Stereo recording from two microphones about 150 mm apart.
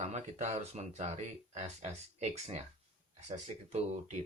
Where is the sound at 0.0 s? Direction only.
50° right (ahead or behind).